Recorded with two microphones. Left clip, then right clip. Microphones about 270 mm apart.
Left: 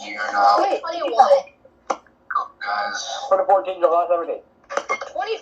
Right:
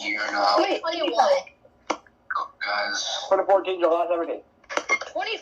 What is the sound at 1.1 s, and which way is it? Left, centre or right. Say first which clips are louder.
Speech: left 6 dB; centre.